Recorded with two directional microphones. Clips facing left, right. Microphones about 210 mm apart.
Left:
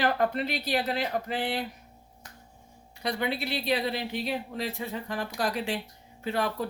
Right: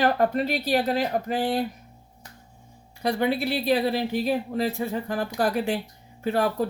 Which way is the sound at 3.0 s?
45° right (ahead or behind).